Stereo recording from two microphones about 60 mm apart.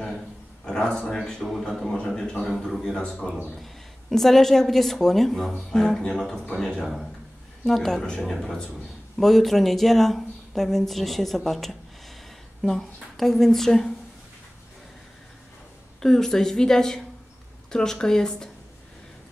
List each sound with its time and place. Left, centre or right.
0.7 s a man's voice: centre
3.0 s speech: centre
3.5 s speech: centre
16.0 s speech: centre